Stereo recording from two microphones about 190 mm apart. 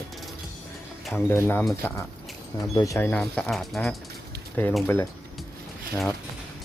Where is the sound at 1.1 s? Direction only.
10° left (ahead or behind).